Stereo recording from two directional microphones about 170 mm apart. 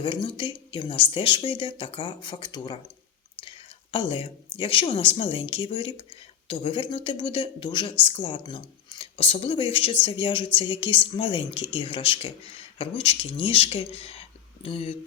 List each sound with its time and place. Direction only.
0.0 s speech: 30° left (ahead or behind)
3.9 s speech: 30° left (ahead or behind)